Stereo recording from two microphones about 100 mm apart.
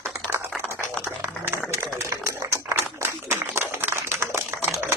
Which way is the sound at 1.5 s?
30° right (ahead or behind).